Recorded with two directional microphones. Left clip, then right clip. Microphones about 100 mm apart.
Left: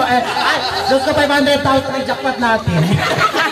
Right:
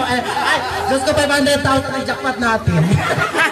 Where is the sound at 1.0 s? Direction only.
45° right (ahead or behind).